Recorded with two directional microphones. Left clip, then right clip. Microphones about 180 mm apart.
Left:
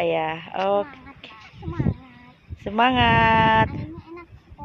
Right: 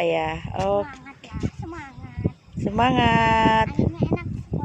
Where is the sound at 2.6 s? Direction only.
10° right (ahead or behind).